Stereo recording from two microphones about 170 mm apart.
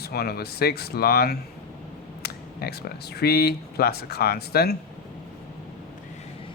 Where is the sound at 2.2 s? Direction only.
70° left (ahead or behind).